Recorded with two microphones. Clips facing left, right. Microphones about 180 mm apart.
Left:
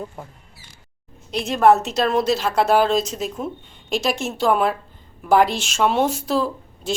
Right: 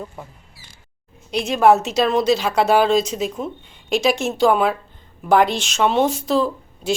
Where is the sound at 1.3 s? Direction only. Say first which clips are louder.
Right 1 dB; centre (ahead or behind).